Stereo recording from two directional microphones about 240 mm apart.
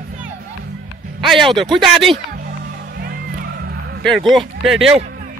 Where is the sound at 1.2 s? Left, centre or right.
Centre.